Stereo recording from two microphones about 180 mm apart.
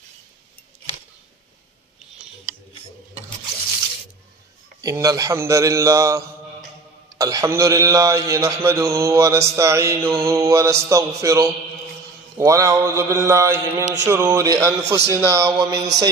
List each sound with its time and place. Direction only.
4.8 s speech: 20° right (ahead or behind)